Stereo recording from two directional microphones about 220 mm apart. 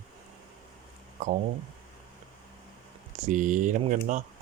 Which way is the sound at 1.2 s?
35° right (ahead or behind).